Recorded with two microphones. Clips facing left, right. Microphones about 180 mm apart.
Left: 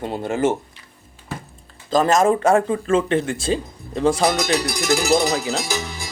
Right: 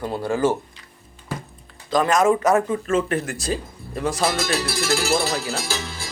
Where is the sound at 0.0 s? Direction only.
25° left (ahead or behind).